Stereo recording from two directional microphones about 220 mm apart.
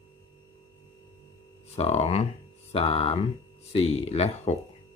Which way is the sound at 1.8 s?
30° left (ahead or behind).